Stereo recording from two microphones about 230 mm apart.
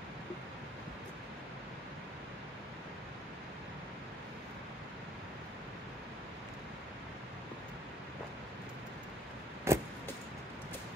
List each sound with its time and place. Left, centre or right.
9.7 s vehicle: centre